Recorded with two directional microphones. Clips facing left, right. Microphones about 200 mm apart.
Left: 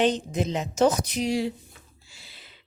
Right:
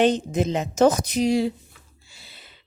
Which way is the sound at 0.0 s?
50° right (ahead or behind).